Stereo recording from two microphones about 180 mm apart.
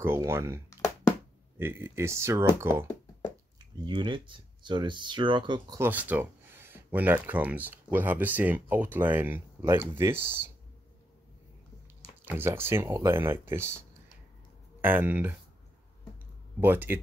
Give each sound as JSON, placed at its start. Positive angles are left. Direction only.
{"t": 0.0, "sound": "speech", "side_deg": -15}
{"t": 1.6, "sound": "speech", "side_deg": -15}
{"t": 2.9, "sound": "a sound", "side_deg": 10}
{"t": 3.8, "sound": "speech", "side_deg": -25}
{"t": 5.8, "sound": "speech", "side_deg": -10}
{"t": 12.3, "sound": "speech", "side_deg": -10}
{"t": 14.8, "sound": "speech", "side_deg": -10}
{"t": 16.5, "sound": "speech", "side_deg": -10}